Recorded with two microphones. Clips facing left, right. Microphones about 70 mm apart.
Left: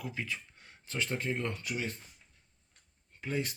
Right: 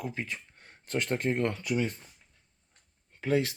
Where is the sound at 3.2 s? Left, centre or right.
Right.